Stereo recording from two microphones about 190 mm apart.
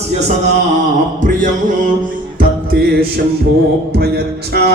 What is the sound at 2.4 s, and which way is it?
Music, 55° right (ahead or behind).